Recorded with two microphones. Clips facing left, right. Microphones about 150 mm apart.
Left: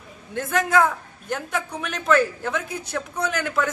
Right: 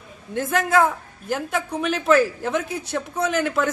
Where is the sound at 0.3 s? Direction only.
Centre (ahead or behind).